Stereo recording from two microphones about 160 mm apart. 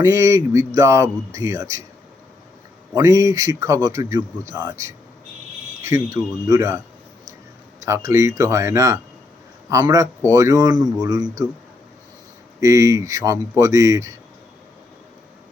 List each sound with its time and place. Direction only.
0.0 s a man's voice: 20° right (ahead or behind)
2.9 s a man's voice: 20° right (ahead or behind)
12.5 s a man's voice: 20° right (ahead or behind)